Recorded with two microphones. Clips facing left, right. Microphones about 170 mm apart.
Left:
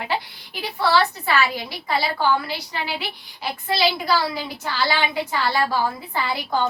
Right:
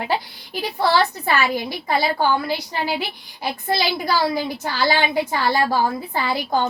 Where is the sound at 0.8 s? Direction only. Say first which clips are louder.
Right 1 dB; 45° right (ahead or behind).